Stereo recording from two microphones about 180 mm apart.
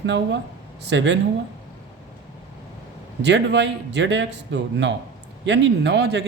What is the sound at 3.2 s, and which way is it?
A man's voice, 75° right (ahead or behind).